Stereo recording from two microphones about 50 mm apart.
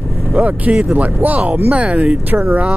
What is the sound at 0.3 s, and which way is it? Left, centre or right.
Speech, right.